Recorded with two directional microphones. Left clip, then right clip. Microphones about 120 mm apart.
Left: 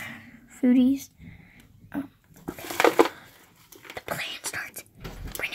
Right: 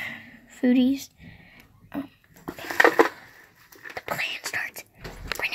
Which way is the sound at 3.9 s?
25° left (ahead or behind).